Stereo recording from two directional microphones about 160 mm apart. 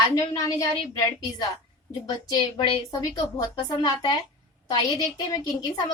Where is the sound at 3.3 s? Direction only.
25° left (ahead or behind).